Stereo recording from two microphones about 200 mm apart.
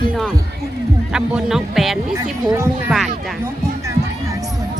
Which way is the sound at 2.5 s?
10° right (ahead or behind).